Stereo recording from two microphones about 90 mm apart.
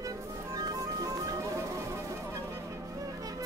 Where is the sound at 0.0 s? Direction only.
40° right (ahead or behind).